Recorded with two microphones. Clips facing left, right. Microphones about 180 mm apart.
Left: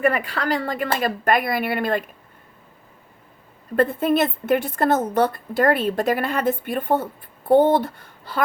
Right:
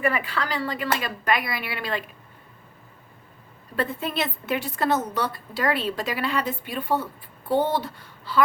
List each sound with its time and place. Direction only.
0.0 s a woman's voice: 50° left (ahead or behind)
3.8 s a woman's voice: 50° left (ahead or behind)